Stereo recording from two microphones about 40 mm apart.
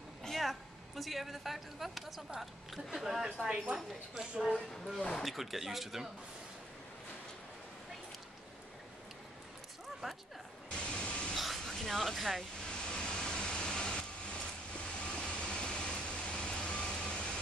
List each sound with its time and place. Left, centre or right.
0.4 s a woman's voice: centre
10.0 s a sound: centre
10.7 s vehicle: left
11.3 s a sound: centre
11.6 s speech: centre
12.8 s vehicle: left